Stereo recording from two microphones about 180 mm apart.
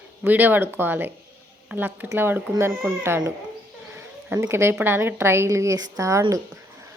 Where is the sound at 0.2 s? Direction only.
10° right (ahead or behind).